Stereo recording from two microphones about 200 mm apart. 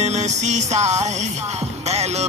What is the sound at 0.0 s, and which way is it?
Music, 35° right (ahead or behind).